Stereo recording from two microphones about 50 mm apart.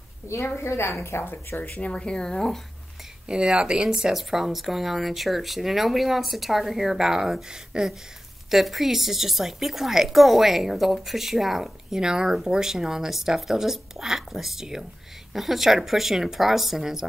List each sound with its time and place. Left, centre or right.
0.6 s a woman's voice: left
1.6 s speech: left; by 2.6 s centre
3.3 s speech: centre
8.5 s speech: centre